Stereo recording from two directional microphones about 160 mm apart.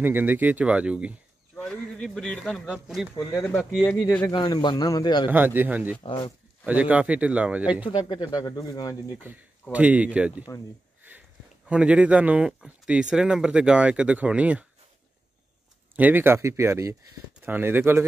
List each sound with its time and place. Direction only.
0.0 s a man's voice: 10° right (ahead or behind)
1.5 s speech: 5° left (ahead or behind)
3.8 s speech: 20° left (ahead or behind)
4.3 s speech: 25° left (ahead or behind)
5.3 s a man's voice: 10° right (ahead or behind)
6.0 s speech: 30° left (ahead or behind)
6.6 s a man's voice: 10° right (ahead or behind)
7.8 s speech: 30° left (ahead or behind)
9.2 s a man's voice: 10° right (ahead or behind)
16.0 s a man's voice: 10° right (ahead or behind)